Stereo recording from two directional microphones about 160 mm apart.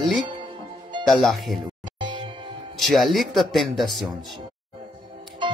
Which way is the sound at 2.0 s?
30° right (ahead or behind).